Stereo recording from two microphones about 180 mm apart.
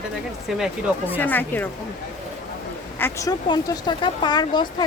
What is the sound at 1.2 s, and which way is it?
Speech, 10° left (ahead or behind).